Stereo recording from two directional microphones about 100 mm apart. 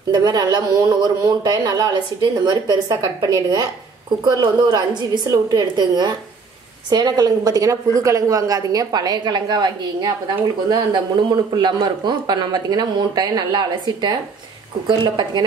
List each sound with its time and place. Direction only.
0.1 s a man's voice: 45° right (ahead or behind)